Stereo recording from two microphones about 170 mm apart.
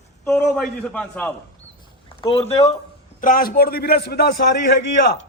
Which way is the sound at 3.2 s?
55° left (ahead or behind).